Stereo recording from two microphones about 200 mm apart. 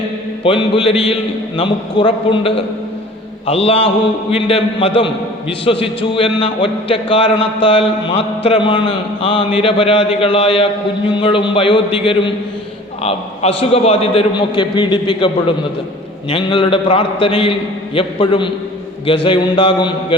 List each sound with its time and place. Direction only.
0.4 s a man's voice: 25° left (ahead or behind)